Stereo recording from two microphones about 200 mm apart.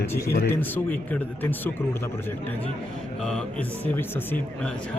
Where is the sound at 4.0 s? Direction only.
10° left (ahead or behind).